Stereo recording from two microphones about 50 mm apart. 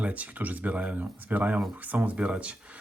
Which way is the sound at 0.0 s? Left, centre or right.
Right.